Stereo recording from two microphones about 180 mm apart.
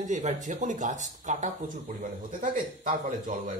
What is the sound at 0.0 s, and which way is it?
Speech, 40° right (ahead or behind).